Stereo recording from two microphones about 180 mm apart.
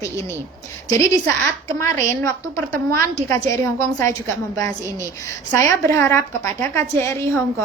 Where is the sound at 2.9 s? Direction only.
15° left (ahead or behind).